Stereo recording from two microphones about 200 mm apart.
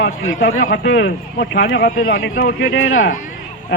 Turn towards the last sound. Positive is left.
turn(degrees=85)